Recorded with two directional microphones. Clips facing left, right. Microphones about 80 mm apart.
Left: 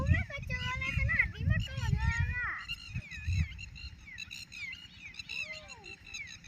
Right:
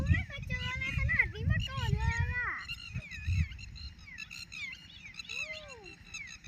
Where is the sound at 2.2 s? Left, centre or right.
Centre.